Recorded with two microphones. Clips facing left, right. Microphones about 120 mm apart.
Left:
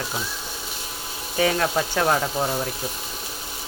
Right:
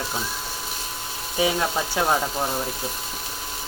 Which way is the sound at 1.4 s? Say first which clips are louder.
Left 2 dB; 10° right (ahead or behind).